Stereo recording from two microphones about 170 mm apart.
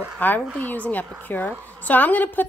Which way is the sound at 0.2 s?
10° left (ahead or behind).